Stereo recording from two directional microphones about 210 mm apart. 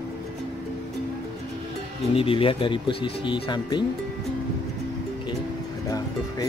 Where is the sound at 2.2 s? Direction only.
25° left (ahead or behind).